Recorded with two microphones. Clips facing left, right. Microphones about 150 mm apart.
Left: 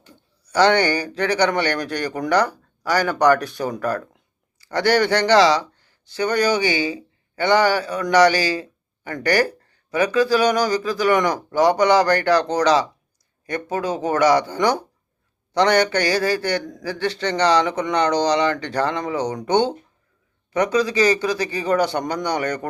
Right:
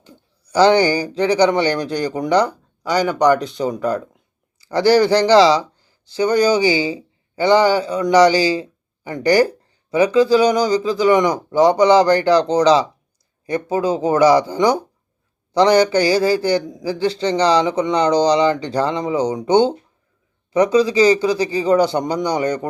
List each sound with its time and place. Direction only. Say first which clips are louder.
0.0 s speech: right 4 dB; 30° right (ahead or behind)